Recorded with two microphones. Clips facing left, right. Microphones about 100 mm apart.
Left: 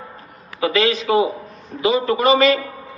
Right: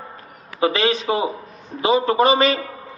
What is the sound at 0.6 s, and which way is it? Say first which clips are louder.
A man's voice: left 1 dB; 30° right (ahead or behind).